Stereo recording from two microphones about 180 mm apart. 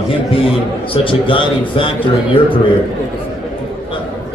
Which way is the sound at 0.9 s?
30° left (ahead or behind).